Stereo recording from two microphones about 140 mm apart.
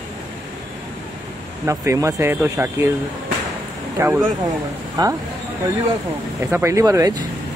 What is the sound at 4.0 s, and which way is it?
Speech, 20° right (ahead or behind).